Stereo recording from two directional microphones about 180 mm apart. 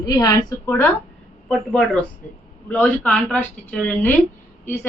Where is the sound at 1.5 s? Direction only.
Centre (ahead or behind).